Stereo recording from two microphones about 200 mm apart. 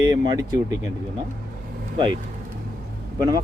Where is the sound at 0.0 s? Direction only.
20° right (ahead or behind).